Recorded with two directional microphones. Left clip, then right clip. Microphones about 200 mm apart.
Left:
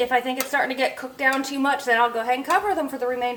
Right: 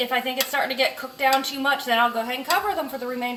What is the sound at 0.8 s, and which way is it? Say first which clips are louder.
Speech: even; 35° left (ahead or behind).